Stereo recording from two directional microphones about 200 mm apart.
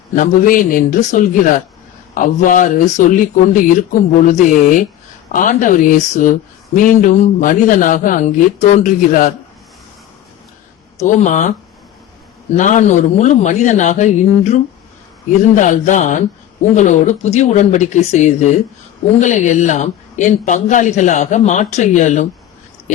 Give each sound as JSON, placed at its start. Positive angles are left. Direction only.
{"t": 0.2, "sound": "speech", "side_deg": 45}
{"t": 11.0, "sound": "speech", "side_deg": 40}
{"t": 12.5, "sound": "speech", "side_deg": 40}